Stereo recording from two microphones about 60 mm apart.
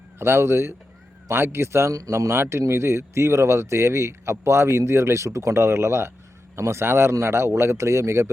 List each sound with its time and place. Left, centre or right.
0.2 s speech: right
1.9 s speech: right
2.1 s speech: right